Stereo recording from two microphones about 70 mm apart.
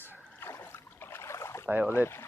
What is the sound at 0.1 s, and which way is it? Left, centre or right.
Rowboat, left.